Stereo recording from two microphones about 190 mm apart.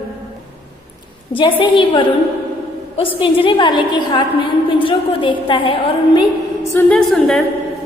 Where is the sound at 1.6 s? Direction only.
25° left (ahead or behind).